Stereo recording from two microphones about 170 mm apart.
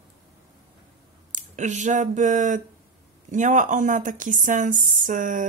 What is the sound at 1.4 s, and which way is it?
Speech, 45° right (ahead or behind).